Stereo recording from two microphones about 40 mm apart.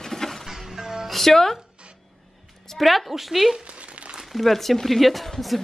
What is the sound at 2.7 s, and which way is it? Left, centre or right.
Speech, centre.